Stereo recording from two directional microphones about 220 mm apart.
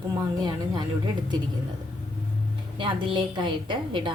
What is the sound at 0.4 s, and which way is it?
Speech, 20° right (ahead or behind).